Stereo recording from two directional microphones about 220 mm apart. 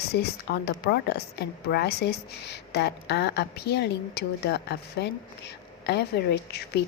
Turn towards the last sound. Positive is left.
turn(degrees=45)  # may be behind; listen again after turning